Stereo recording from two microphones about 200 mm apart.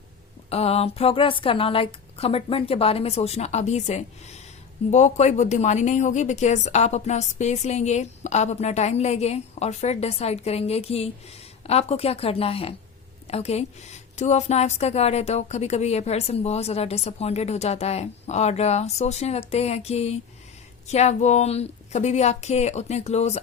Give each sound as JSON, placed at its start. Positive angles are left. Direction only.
{"t": 0.5, "sound": "a woman's voice", "side_deg": 30}